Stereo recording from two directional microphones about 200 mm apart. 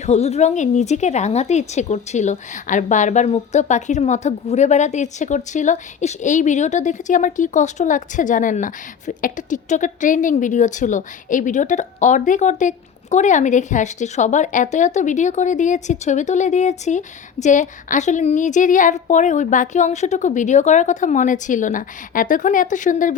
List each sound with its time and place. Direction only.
0.0 s a woman's voice: 35° left (ahead or behind)